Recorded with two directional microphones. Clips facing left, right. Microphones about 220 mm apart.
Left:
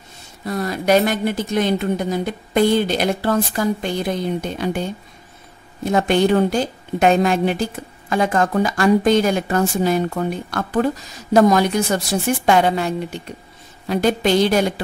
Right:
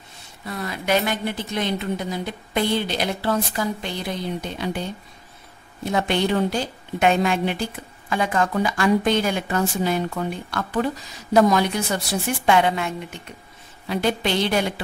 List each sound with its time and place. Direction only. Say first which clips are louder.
0.5 s a woman's voice: left 6 dB; 40° left (ahead or behind)
5.9 s a woman's voice: left 6 dB; 45° left (ahead or behind)